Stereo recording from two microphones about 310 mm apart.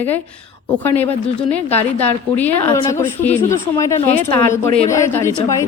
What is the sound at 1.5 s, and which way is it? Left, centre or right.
A woman's voice, centre.